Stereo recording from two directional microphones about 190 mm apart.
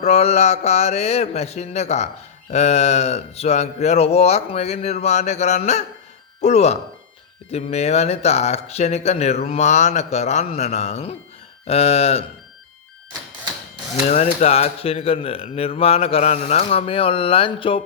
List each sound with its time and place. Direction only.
0.0 s speech: 35° left (ahead or behind)
13.9 s speech: 35° left (ahead or behind)